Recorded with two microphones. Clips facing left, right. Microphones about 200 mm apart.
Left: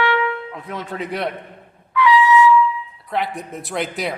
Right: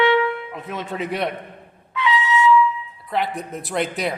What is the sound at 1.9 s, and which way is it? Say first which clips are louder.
Trumpet: left 6 dB; 25° right (ahead or behind).